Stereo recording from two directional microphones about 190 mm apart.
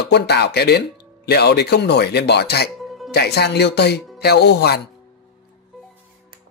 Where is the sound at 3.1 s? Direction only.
60° left (ahead or behind).